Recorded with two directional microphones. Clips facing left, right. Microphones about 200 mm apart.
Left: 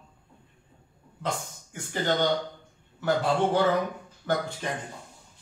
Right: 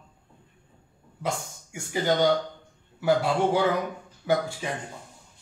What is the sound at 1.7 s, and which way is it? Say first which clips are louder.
A man's voice: right 2 dB; 10° right (ahead or behind).